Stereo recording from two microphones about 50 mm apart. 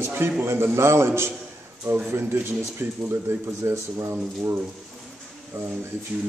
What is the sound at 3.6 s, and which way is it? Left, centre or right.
Speech, right.